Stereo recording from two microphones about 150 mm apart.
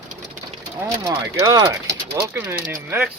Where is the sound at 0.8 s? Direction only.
20° right (ahead or behind).